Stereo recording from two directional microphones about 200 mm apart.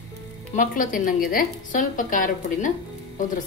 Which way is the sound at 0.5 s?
40° left (ahead or behind).